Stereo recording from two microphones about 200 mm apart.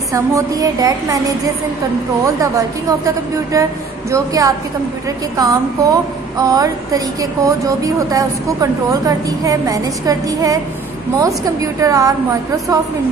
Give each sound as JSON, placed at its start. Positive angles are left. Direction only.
{"t": 0.1, "sound": "speech", "side_deg": -15}